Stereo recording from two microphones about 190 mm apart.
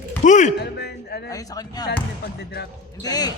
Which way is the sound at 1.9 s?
60° left (ahead or behind).